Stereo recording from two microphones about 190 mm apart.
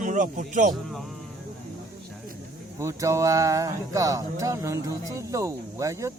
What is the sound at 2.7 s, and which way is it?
Speech, 15° right (ahead or behind).